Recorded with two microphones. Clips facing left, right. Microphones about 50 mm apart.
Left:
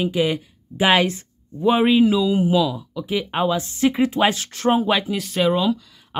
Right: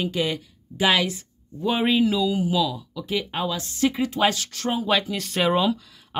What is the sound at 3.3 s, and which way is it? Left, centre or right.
Speech, left.